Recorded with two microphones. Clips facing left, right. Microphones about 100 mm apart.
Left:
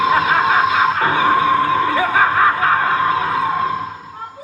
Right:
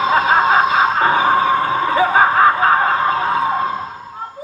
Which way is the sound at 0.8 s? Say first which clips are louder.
Right 1 dB; 25° right (ahead or behind).